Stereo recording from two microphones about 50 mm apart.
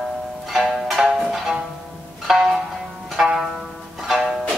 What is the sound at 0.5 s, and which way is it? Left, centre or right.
Music, centre.